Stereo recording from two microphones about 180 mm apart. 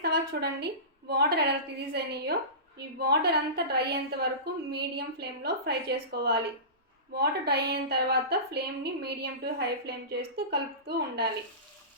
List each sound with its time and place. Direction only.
0.0 s a woman's voice: 65° right (ahead or behind)